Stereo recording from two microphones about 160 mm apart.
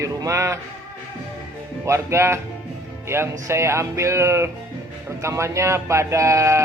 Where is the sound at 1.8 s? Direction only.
15° right (ahead or behind).